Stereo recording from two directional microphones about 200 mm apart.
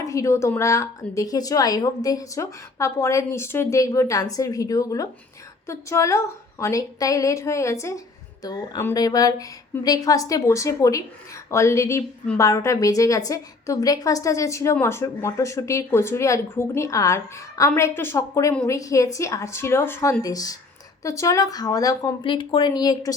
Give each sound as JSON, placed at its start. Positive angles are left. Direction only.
{"t": 0.0, "sound": "a woman's voice", "side_deg": 15}